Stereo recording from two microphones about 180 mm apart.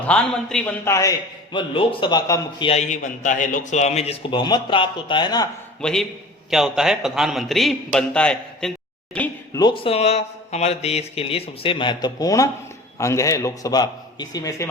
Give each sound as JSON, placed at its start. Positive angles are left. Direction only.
{"t": 0.1, "sound": "a man's voice", "side_deg": 5}
{"t": 0.9, "sound": "a man's voice", "side_deg": 15}
{"t": 1.5, "sound": "a man's voice", "side_deg": 30}
{"t": 2.6, "sound": "a man's voice", "side_deg": 40}
{"t": 5.8, "sound": "a man's voice", "side_deg": 5}
{"t": 9.6, "sound": "a man's voice", "side_deg": 25}